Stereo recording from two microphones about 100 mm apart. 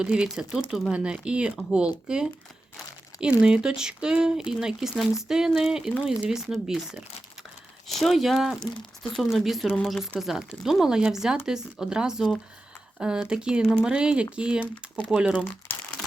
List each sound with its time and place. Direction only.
0.0 s speech: 10° right (ahead or behind)
15.7 s crumpling: 25° left (ahead or behind)